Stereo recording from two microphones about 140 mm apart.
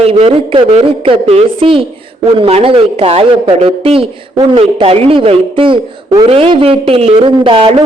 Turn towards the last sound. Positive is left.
turn(degrees=-40)  # may be behind; listen again after turning